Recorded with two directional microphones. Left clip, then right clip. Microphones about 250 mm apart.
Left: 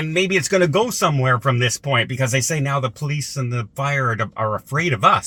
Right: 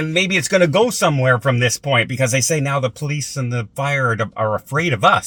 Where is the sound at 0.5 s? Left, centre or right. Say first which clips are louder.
Right 5 dB; centre.